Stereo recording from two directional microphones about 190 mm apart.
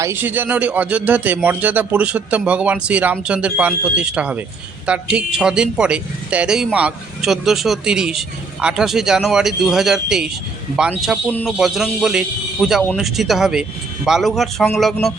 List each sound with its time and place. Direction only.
0.0 s speech: 10° right (ahead or behind)
11.3 s speech: 10° left (ahead or behind)